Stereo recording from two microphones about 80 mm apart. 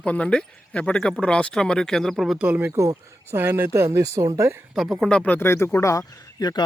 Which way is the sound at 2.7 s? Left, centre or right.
Right.